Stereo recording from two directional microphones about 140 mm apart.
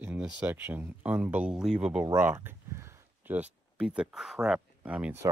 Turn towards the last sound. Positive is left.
turn(degrees=-10)  # may be behind; listen again after turning